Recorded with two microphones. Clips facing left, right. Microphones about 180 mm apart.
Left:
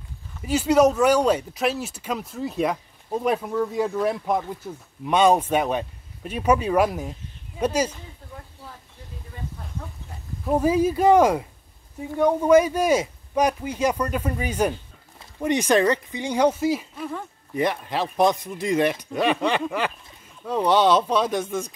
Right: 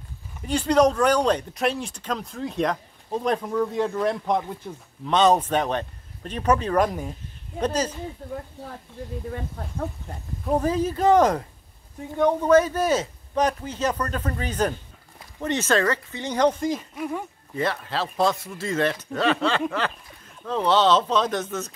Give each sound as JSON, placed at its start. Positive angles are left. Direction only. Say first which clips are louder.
{"t": 0.4, "sound": "speech", "louder": "left 1 dB", "side_deg": 5}
{"t": 10.4, "sound": "speech", "louder": "left 3 dB", "side_deg": 5}
{"t": 17.0, "sound": "speech", "louder": "right 2 dB", "side_deg": -15}
{"t": 17.6, "sound": "speech", "louder": "left 2 dB", "side_deg": 15}